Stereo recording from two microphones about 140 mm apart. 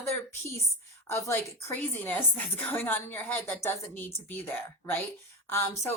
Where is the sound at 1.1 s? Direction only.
20° left (ahead or behind).